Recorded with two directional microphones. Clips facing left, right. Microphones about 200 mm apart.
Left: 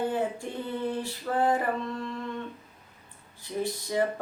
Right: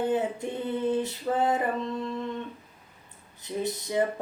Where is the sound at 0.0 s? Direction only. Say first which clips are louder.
Right 2 dB; 20° right (ahead or behind).